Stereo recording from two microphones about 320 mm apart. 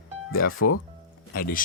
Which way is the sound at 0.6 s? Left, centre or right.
Left.